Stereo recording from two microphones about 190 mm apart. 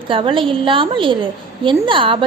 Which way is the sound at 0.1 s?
25° right (ahead or behind).